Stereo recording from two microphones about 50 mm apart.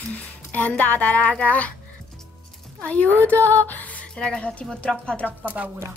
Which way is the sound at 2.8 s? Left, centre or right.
Left.